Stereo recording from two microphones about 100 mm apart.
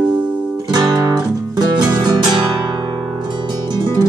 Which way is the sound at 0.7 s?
40° right (ahead or behind).